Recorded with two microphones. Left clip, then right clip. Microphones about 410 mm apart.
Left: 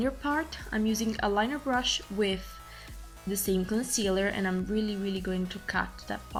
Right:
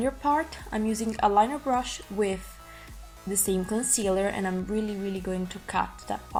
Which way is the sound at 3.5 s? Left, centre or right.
Right.